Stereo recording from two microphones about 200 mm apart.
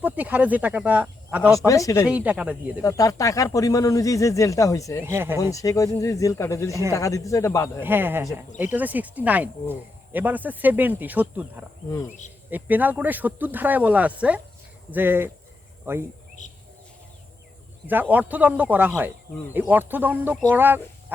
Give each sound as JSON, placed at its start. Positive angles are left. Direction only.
{"t": 0.0, "sound": "speech", "side_deg": -10}
{"t": 1.5, "sound": "speech", "side_deg": 15}
{"t": 2.0, "sound": "speech", "side_deg": -5}
{"t": 2.8, "sound": "speech", "side_deg": 15}
{"t": 5.0, "sound": "speech", "side_deg": -10}
{"t": 5.4, "sound": "speech", "side_deg": 15}
{"t": 7.8, "sound": "speech", "side_deg": -10}
{"t": 12.0, "sound": "speech", "side_deg": 35}
{"t": 12.5, "sound": "speech", "side_deg": -10}
{"t": 16.4, "sound": "a sound", "side_deg": 40}
{"t": 17.8, "sound": "speech", "side_deg": -10}